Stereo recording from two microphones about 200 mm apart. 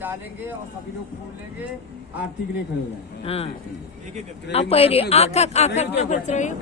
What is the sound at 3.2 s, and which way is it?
Speech, 30° left (ahead or behind).